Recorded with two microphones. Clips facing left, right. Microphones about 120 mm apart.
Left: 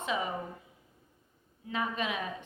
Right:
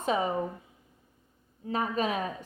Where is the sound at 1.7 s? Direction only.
40° right (ahead or behind).